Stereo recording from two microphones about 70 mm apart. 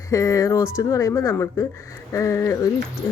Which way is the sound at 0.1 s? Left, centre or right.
Left.